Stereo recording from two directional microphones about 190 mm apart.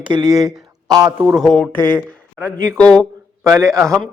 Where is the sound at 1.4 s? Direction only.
Centre (ahead or behind).